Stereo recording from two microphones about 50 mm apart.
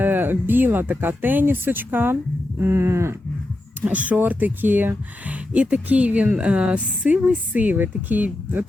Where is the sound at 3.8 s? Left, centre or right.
Right.